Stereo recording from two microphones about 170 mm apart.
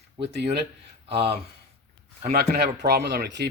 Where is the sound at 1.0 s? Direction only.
35° right (ahead or behind).